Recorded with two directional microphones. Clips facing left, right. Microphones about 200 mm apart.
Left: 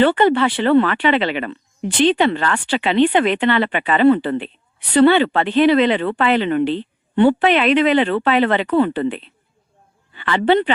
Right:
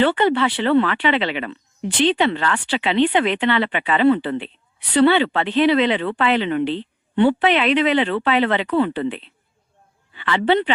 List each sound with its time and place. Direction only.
0.0 s speech: 50° left (ahead or behind)